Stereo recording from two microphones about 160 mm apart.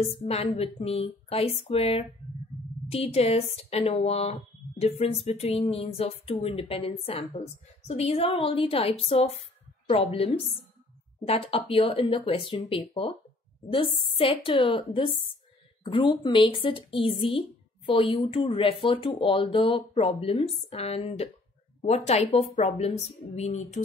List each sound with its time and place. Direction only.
0.0 s a woman's voice: 40° left (ahead or behind)